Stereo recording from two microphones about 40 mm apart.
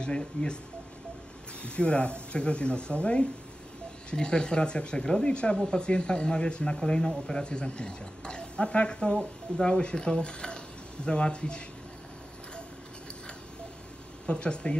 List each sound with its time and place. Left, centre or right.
0.0 s speech: left
1.6 s speech: left
14.2 s speech: left